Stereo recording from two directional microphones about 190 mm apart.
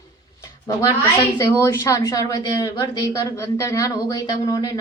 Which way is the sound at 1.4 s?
15° left (ahead or behind).